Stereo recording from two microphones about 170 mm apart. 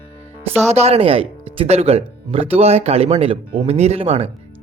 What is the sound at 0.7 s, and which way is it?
Speech, 40° right (ahead or behind).